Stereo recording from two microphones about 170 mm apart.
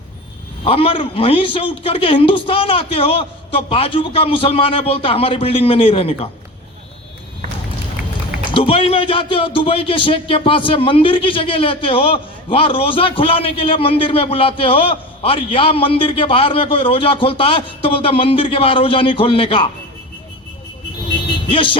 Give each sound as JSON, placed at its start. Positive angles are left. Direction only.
{"t": 0.6, "sound": "a man's voice", "side_deg": 35}
{"t": 8.4, "sound": "a man's voice", "side_deg": 30}
{"t": 21.5, "sound": "a man's voice", "side_deg": 30}